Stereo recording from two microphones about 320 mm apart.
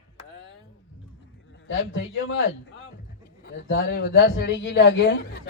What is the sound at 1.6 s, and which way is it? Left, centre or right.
A man's voice, left.